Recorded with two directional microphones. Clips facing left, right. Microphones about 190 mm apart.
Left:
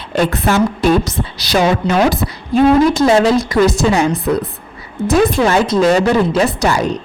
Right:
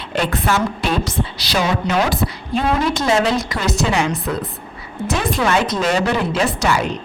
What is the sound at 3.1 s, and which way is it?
A woman's voice, 35° left (ahead or behind).